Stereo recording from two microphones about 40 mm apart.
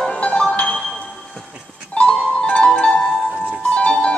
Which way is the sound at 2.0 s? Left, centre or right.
Left.